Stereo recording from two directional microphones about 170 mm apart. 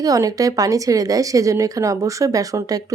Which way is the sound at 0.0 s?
20° right (ahead or behind).